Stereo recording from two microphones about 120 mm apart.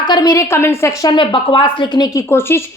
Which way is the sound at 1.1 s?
45° left (ahead or behind).